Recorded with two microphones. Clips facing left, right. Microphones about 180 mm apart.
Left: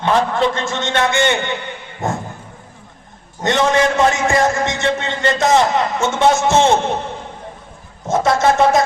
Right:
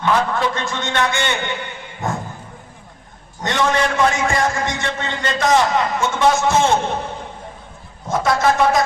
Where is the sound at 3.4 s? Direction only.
25° left (ahead or behind).